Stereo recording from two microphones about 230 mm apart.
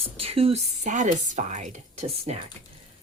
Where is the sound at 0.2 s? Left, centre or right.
Right.